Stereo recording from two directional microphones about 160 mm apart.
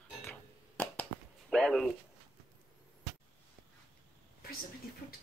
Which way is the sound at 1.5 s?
5° left (ahead or behind).